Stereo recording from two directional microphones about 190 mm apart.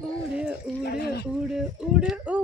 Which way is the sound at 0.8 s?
55° left (ahead or behind).